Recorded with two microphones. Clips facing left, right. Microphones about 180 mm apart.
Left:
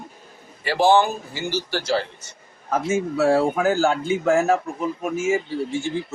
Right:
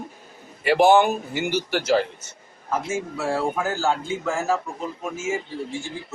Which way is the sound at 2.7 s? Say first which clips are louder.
Left 4 dB; 80° left.